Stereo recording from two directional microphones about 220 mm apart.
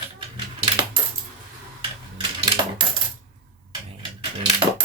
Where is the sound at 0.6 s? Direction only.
20° right (ahead or behind).